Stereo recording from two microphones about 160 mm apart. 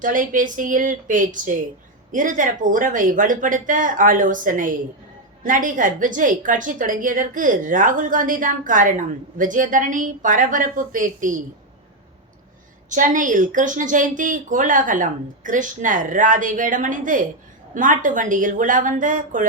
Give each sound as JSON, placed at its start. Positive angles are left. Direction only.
{"t": 0.0, "sound": "a woman's voice", "side_deg": -55}
{"t": 12.9, "sound": "a woman's voice", "side_deg": -55}